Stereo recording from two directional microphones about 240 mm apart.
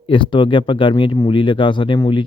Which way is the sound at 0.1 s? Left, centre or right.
Left.